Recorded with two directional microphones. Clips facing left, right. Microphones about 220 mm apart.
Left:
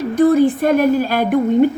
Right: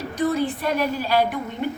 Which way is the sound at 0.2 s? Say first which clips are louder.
Left 10 dB; 50° left (ahead or behind).